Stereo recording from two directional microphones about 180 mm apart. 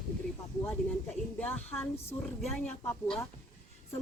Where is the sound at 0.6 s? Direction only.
5° left (ahead or behind).